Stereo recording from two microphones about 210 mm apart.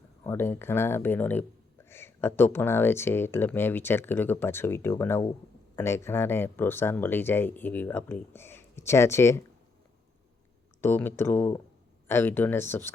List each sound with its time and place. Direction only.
0.3 s speech: 10° left (ahead or behind)
10.8 s speech: 10° left (ahead or behind)